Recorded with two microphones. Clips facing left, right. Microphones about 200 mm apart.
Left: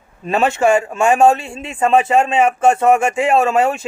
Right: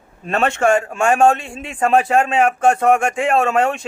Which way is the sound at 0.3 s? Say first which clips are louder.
Left 2 dB; 5° left (ahead or behind).